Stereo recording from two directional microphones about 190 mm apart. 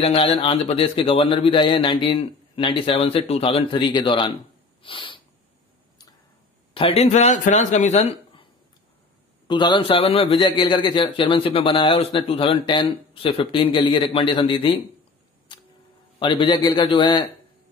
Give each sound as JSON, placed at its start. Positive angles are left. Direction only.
{"t": 0.0, "sound": "a man's voice", "side_deg": 30}
{"t": 4.8, "sound": "a sound", "side_deg": 25}
{"t": 6.7, "sound": "speech", "side_deg": 30}
{"t": 9.5, "sound": "a man's voice", "side_deg": 25}
{"t": 15.5, "sound": "a sound", "side_deg": 25}
{"t": 16.2, "sound": "a man's voice", "side_deg": 25}